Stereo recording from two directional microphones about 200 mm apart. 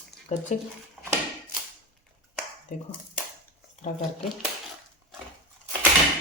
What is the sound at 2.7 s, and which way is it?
Speech, 40° left (ahead or behind).